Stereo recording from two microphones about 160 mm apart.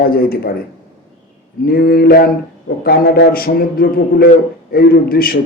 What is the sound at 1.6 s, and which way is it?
A man's voice, 70° left (ahead or behind).